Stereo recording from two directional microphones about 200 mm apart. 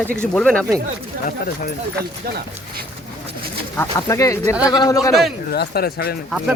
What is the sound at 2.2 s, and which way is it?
Speech, 50° right (ahead or behind).